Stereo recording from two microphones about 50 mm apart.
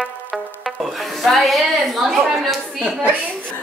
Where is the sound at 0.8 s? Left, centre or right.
Centre.